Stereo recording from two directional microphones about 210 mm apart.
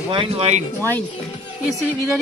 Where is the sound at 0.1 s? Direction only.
25° right (ahead or behind).